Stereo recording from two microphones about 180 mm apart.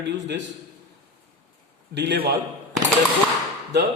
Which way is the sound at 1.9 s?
75° right (ahead or behind).